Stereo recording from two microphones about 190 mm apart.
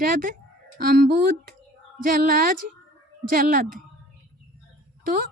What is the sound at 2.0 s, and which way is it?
Speech, 50° right (ahead or behind).